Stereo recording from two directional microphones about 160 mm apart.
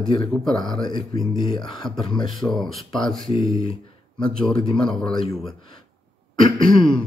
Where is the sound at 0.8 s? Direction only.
30° left (ahead or behind).